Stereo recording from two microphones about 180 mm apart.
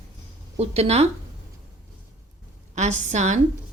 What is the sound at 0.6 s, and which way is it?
Speech, 35° right (ahead or behind).